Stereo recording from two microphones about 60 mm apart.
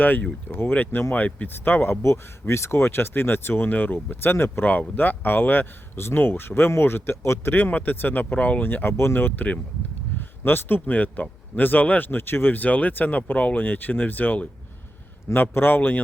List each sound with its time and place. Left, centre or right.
0.0 s speech: left
2.5 s speech: left
4.6 s speech: left
7.2 s speech: left
7.5 s speech: left